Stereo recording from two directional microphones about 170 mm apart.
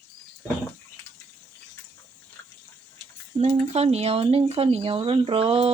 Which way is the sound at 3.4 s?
40° right (ahead or behind).